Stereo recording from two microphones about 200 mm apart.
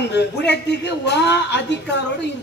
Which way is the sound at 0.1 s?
60° left (ahead or behind).